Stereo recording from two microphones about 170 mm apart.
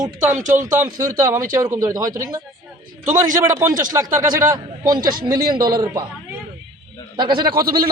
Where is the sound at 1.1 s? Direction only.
20° right (ahead or behind).